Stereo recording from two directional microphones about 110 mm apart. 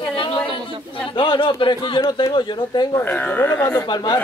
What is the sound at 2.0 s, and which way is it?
Speech, 35° left (ahead or behind).